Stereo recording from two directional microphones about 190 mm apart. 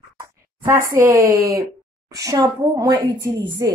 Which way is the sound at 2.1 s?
20° right (ahead or behind).